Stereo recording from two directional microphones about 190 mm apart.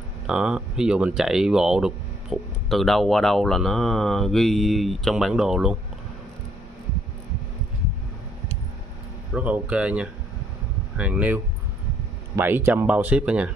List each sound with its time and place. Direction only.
0.3 s speech: 5° right (ahead or behind)
9.3 s speech: 5° right (ahead or behind)